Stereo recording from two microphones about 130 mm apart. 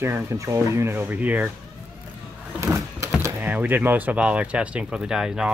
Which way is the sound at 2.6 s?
20° right (ahead or behind).